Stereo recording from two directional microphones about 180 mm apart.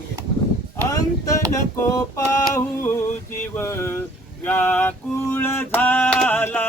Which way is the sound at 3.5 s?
15° left (ahead or behind).